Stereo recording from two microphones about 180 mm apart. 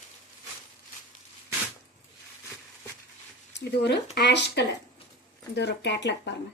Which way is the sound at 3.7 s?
65° left (ahead or behind).